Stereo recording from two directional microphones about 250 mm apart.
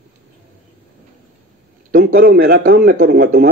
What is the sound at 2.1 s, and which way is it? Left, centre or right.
Speech, right.